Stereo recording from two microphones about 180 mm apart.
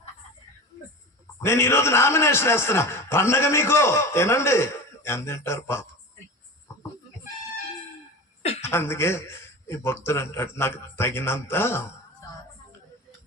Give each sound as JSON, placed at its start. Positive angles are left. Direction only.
{"t": 1.4, "sound": "a man's voice", "side_deg": 15}
{"t": 8.4, "sound": "a sound", "side_deg": 35}
{"t": 8.6, "sound": "a man's voice", "side_deg": 15}